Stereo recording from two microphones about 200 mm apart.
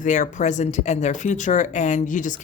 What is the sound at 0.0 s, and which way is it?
Speech, 40° left (ahead or behind).